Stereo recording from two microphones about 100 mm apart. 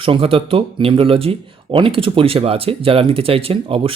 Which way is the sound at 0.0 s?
65° right (ahead or behind).